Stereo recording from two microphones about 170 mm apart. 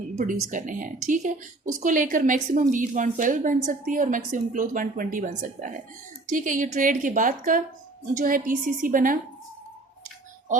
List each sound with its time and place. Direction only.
0.2 s a woman's voice: 50° right (ahead or behind)